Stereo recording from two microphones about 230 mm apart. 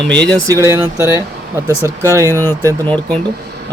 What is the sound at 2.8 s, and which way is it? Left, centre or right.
Speech, centre.